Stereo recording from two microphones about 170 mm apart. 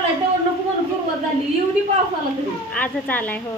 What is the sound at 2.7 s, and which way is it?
Speech, 10° left (ahead or behind).